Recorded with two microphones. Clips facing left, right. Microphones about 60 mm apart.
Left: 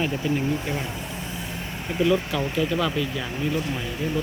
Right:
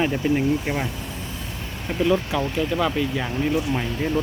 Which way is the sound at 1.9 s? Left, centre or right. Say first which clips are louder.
Right 1 dB; right.